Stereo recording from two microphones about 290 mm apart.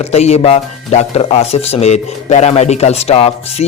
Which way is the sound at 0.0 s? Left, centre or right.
Left.